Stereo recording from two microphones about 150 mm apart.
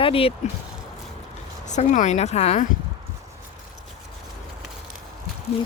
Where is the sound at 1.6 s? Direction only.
50° left (ahead or behind).